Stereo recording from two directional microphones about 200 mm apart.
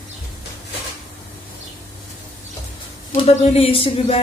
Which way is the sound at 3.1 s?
30° left (ahead or behind).